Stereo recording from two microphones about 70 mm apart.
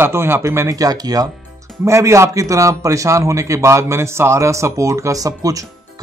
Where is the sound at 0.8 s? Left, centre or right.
Right.